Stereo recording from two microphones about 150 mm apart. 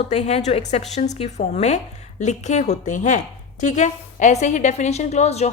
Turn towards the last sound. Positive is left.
turn(degrees=50)  # may be behind; listen again after turning